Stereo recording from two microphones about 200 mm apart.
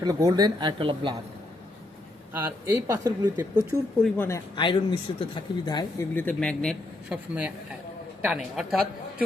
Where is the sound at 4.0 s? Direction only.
10° left (ahead or behind).